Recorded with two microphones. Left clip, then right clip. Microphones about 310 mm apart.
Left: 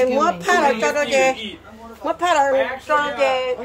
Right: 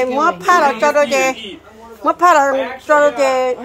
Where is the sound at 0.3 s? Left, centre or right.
Centre.